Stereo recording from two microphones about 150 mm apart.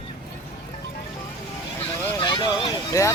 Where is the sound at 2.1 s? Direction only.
30° left (ahead or behind).